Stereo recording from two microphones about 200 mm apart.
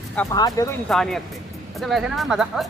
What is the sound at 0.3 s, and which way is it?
Speech, 15° left (ahead or behind).